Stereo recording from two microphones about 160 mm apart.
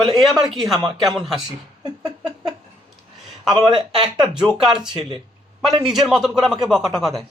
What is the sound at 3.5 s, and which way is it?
Speech, 25° right (ahead or behind).